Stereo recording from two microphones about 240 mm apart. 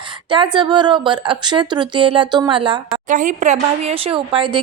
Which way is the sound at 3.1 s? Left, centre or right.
Right.